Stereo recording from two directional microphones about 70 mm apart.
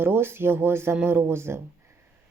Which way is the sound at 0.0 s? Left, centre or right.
Right.